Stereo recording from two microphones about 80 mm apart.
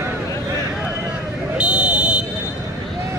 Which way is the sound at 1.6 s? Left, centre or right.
Centre.